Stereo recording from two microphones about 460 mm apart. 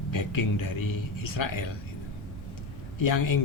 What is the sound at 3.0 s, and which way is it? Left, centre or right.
Speech, left.